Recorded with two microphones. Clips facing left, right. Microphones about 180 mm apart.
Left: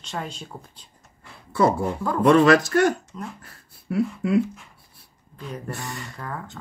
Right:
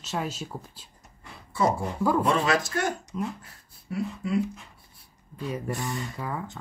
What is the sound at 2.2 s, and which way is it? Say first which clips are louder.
Speech: left 9 dB; 70° left (ahead or behind).